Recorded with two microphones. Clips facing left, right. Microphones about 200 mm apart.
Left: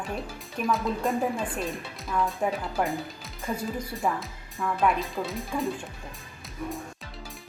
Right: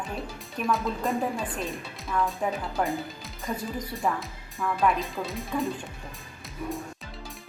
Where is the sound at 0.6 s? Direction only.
Centre (ahead or behind).